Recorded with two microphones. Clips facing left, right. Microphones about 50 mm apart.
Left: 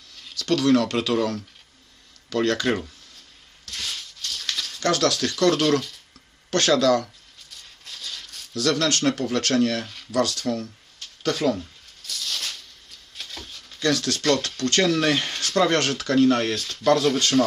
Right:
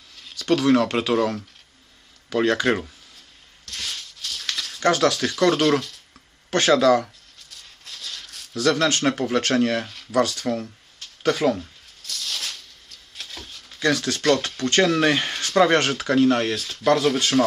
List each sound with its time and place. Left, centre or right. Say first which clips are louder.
0.3 s speech: right 1 dB; centre
3.7 s a sound: even; centre
4.8 s speech: right 3 dB; right
7.5 s rattle: even; centre
8.5 s speech: right 2 dB; centre
9.8 s speech: right 1 dB; centre
10.1 s speech: right 2 dB; right
11.6 s a sound: even; centre
13.7 s speech: right 1 dB; centre